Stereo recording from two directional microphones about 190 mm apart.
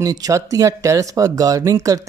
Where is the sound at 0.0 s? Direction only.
20° right (ahead or behind).